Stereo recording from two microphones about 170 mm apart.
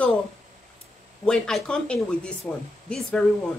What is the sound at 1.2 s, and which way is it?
Speech, 5° left (ahead or behind).